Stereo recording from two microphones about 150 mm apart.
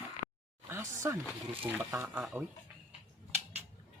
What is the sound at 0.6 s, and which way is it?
Speech, 20° right (ahead or behind).